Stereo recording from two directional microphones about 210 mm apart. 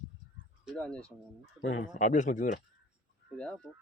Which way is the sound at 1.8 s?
35° left (ahead or behind).